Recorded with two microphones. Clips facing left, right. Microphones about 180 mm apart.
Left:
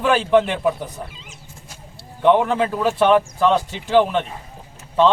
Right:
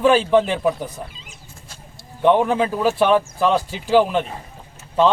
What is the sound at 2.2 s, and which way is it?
A man's voice, 15° right (ahead or behind).